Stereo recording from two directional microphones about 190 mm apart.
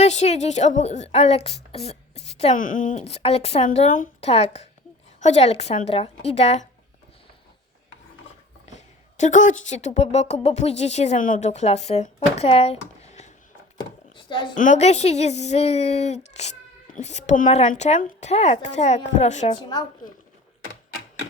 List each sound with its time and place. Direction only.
0.0 s speech: 35° left (ahead or behind)
8.6 s a woman's voice: 40° left (ahead or behind)
14.2 s a sound: 25° left (ahead or behind)
14.6 s speech: 40° left (ahead or behind)
19.5 s a woman's voice: 20° left (ahead or behind)